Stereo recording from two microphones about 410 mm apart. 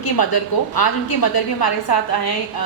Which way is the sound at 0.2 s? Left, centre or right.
Left.